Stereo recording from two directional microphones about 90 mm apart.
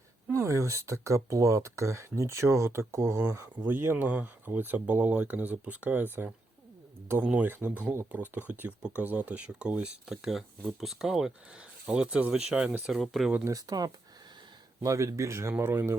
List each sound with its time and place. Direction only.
0.3 s speech: 35° right (ahead or behind); by 13.3 s centre (ahead or behind)
13.4 s speech: 40° right (ahead or behind)
14.8 s speech: 35° right (ahead or behind)